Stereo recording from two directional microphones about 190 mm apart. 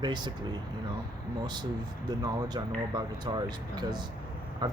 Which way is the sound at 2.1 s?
20° right (ahead or behind).